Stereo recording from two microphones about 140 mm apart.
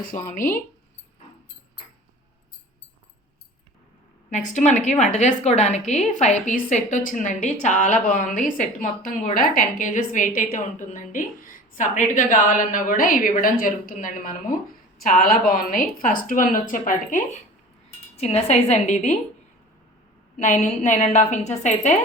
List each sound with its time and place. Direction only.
0.0 s a woman's voice: 80° left
4.3 s a woman's voice: 60° left (ahead or behind)
14.9 s a woman's voice: 80° left
18.2 s a woman's voice: 50° left (ahead or behind)
20.4 s a woman's voice: 55° left (ahead or behind)